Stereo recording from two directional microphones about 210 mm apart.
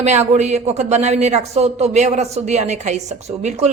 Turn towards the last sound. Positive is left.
turn(degrees=-30)  # may be behind; listen again after turning